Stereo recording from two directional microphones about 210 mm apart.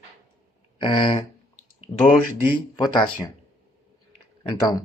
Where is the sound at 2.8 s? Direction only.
20° left (ahead or behind).